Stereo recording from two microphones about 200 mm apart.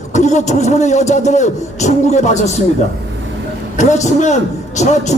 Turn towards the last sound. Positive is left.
turn(degrees=35)  # may be behind; listen again after turning